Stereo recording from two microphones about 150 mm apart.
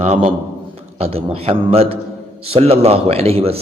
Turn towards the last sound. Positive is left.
turn(degrees=-40)  # may be behind; listen again after turning